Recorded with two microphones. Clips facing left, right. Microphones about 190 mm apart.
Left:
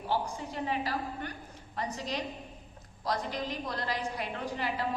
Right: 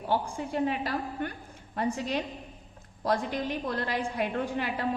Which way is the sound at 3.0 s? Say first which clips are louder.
Right 5 dB; 55° right (ahead or behind).